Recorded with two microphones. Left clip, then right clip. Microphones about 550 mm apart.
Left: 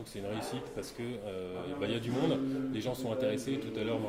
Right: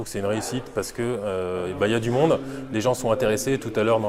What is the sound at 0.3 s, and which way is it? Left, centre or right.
Speech, right.